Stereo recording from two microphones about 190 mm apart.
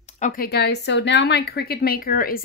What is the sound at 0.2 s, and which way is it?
A woman's voice, 50° left (ahead or behind).